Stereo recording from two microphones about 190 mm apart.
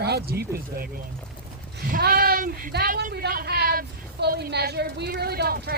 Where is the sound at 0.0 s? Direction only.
55° right (ahead or behind).